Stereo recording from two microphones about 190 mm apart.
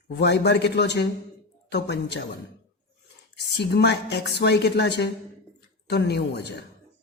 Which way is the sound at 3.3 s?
60° left (ahead or behind).